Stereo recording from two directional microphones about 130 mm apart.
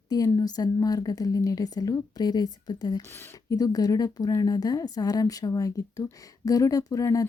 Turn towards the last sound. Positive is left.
turn(degrees=25)  # may be behind; listen again after turning